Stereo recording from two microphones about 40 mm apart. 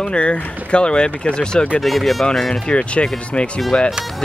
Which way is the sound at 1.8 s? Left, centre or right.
Centre.